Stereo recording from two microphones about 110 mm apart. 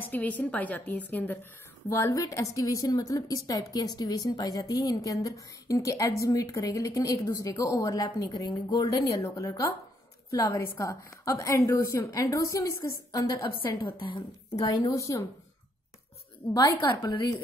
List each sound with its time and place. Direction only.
0.0 s a woman's voice: 15° left (ahead or behind); by 13.7 s 30° left (ahead or behind)
13.9 s a woman's voice: 50° left (ahead or behind)
14.5 s a woman's voice: 35° left (ahead or behind)
16.7 s a woman's voice: 45° left (ahead or behind)